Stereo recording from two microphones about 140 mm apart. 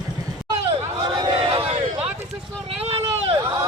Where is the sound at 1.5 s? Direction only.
45° right (ahead or behind).